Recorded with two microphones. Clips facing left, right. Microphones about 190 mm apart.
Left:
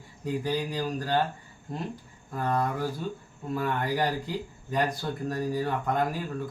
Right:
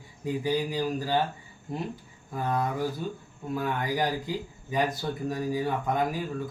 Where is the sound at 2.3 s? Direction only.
5° right (ahead or behind).